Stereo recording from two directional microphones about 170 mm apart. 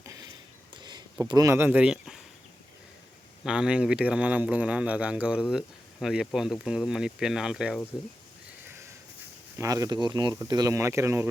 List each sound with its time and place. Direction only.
0.0 s a sound: 20° right (ahead or behind)
0.8 s speech: 25° right (ahead or behind); by 2.2 s centre (ahead or behind)
3.4 s speech: 5° right (ahead or behind)
9.6 s speech: 20° right (ahead or behind)